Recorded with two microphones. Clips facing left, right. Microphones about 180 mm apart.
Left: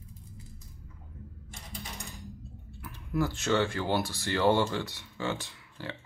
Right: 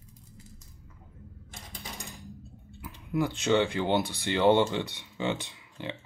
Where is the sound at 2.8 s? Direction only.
15° right (ahead or behind).